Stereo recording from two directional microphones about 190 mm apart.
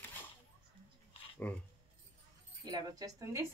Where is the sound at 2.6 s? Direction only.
20° right (ahead or behind).